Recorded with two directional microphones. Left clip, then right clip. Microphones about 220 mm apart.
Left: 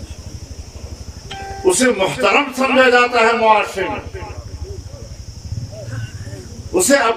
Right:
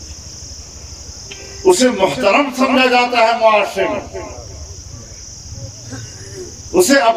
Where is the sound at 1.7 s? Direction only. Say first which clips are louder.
Right 2 dB; 20° right (ahead or behind).